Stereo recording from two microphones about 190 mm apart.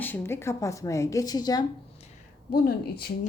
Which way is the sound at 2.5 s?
55° left (ahead or behind).